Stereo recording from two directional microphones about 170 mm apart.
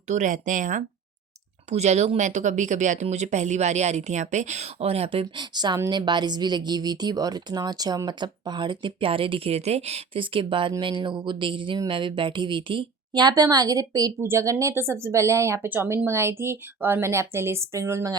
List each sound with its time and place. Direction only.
0.1 s speech: 45° right (ahead or behind); by 18.2 s 20° right (ahead or behind)